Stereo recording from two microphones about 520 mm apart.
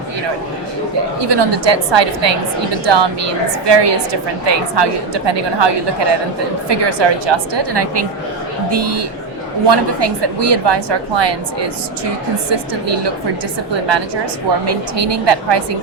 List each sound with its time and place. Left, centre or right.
1.2 s a woman's voice: right
14.9 s a woman's voice: right